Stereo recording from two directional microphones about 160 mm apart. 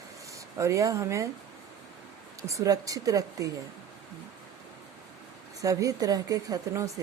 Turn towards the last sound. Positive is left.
turn(degrees=-20)  # may be behind; listen again after turning